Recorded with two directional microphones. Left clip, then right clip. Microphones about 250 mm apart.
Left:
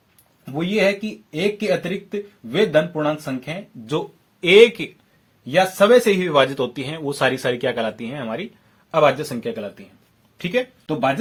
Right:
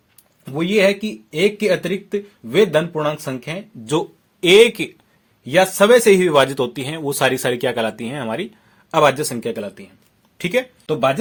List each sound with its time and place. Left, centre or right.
0.4 s speech: right